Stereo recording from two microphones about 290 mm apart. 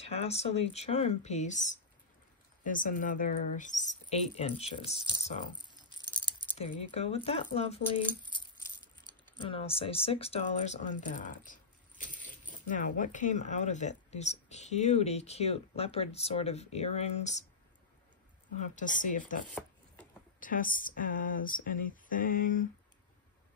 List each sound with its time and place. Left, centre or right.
0.0 s speech: left
5.7 s keys jangling: centre
6.1 s speech: centre
9.4 s speech: centre
18.6 s speech: left
20.3 s speech: left